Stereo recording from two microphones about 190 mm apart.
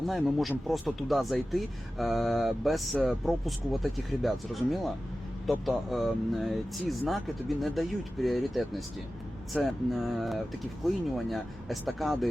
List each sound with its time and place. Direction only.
0.1 s speech: centre (ahead or behind)